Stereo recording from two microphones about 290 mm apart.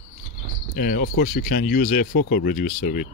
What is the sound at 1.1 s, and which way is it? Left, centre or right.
Speech, left.